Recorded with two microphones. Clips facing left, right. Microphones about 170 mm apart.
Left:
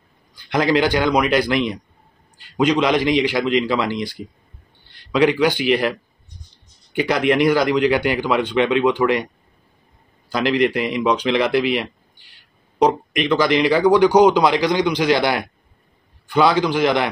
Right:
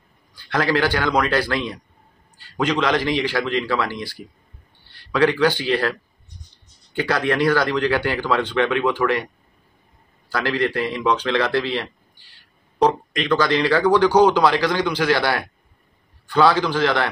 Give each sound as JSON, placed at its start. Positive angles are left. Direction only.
{"t": 0.4, "sound": "a man's voice", "side_deg": 15}
{"t": 10.3, "sound": "speech", "side_deg": 15}